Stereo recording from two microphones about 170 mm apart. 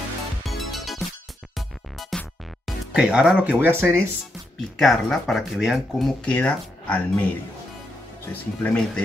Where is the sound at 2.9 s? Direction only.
5° right (ahead or behind).